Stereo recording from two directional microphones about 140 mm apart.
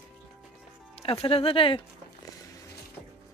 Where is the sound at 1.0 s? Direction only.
45° left (ahead or behind).